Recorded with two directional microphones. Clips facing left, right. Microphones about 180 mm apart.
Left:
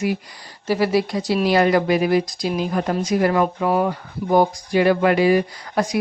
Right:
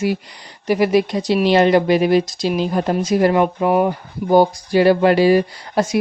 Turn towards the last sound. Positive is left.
turn(degrees=-25)  # may be behind; listen again after turning